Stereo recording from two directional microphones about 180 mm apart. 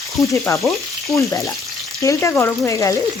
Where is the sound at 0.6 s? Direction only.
Centre (ahead or behind).